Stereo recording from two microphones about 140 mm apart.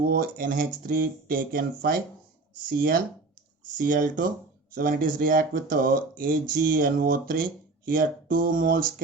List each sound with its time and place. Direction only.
0.0 s speech: 90° right
3.8 s speech: 75° right (ahead or behind)
4.7 s speech: 85° right